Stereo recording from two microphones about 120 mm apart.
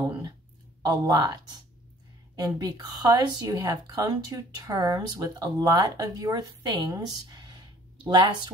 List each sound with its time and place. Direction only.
0.8 s a woman's voice: 35° right (ahead or behind)